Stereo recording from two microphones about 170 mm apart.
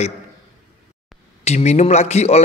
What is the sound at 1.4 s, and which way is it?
A man's voice, 40° left (ahead or behind).